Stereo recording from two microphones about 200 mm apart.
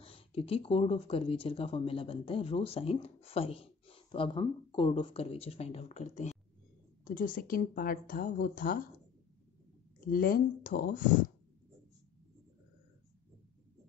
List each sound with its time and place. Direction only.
0.0 s a woman's voice: 30° left (ahead or behind); by 8.8 s 45° left (ahead or behind)
9.9 s a woman's voice: 45° left (ahead or behind)